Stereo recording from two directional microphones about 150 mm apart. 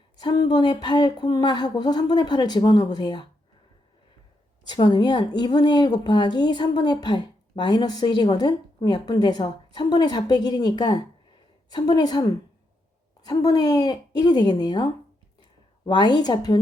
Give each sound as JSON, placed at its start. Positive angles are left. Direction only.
{"t": 0.2, "sound": "speech", "side_deg": 30}
{"t": 4.6, "sound": "speech", "side_deg": 30}
{"t": 13.2, "sound": "speech", "side_deg": 25}
{"t": 15.9, "sound": "speech", "side_deg": 30}